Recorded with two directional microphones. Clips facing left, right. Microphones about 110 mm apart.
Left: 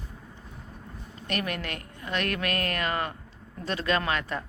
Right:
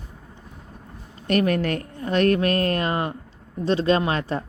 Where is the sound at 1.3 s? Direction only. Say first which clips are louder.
Right 11 dB; 40° right (ahead or behind).